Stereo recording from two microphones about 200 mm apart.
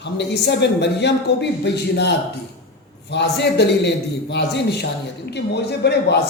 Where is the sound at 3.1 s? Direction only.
60° left (ahead or behind).